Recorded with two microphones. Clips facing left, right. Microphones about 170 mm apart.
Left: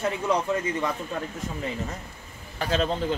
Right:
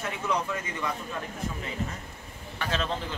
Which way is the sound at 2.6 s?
35° left (ahead or behind).